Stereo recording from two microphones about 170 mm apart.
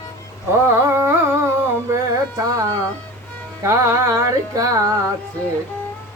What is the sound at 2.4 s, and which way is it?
Carnatic music, 20° right (ahead or behind).